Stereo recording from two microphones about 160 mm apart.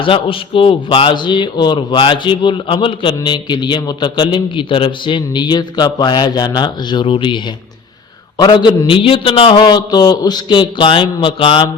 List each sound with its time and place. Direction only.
0.0 s a man's voice: 35° left (ahead or behind)